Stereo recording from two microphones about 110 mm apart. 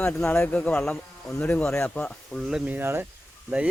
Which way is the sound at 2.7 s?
20° right (ahead or behind).